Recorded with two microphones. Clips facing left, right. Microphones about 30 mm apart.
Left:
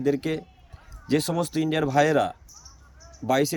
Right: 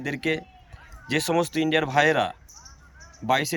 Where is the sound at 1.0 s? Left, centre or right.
Right.